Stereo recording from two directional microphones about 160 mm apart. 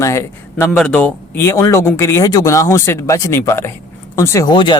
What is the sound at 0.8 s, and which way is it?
Speech, 5° left (ahead or behind).